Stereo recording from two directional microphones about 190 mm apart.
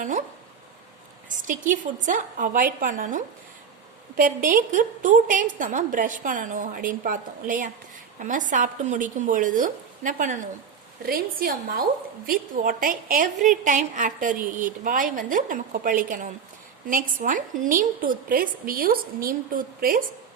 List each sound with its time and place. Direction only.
1.7 s a woman's voice: 45° right (ahead or behind)